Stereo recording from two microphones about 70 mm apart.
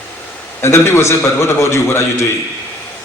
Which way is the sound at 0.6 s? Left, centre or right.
Left.